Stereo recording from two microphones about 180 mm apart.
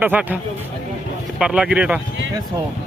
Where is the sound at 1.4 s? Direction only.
5° right (ahead or behind).